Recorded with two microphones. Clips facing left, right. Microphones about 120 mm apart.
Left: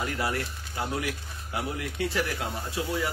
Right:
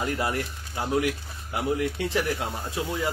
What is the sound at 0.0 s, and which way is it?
A man's voice, 20° right (ahead or behind).